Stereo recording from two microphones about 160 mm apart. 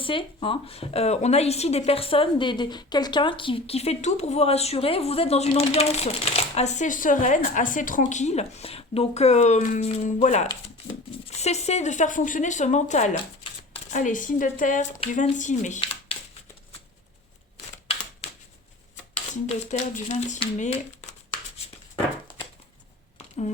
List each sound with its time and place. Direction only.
0.0 s a woman's voice: 35° left (ahead or behind); by 16.1 s 50° left (ahead or behind)
19.5 s speech: 40° left (ahead or behind)